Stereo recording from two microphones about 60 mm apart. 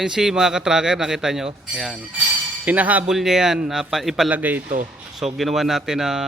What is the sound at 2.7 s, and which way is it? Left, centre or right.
Speech, right.